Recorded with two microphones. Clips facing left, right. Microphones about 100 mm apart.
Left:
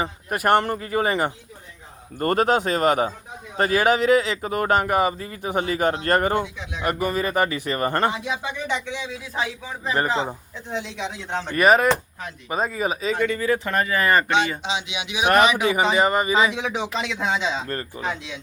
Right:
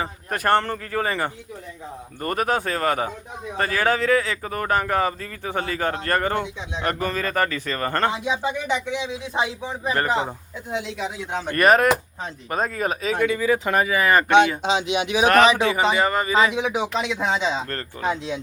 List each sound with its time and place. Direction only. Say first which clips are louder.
0.3 s speech: left 1 dB; 15° left (ahead or behind)
2.1 s speech: left 4 dB; 30° left (ahead or behind)
6.4 s speech: right 1 dB; 20° right (ahead or behind)
6.8 s speech: left 2 dB; 15° left (ahead or behind)
8.2 s speech: right 3 dB; 15° right (ahead or behind)
10.7 s speech: right 1 dB; 5° right (ahead or behind)
11.5 s speech: even; centre (ahead or behind)
14.6 s speech: right 6 dB; 45° right (ahead or behind)
15.6 s speech: left 1 dB; 15° left (ahead or behind)
16.3 s speech: right 1 dB; 5° left (ahead or behind)
16.6 s speech: right 3 dB; 10° right (ahead or behind)
17.7 s speech: left 2 dB; 15° left (ahead or behind)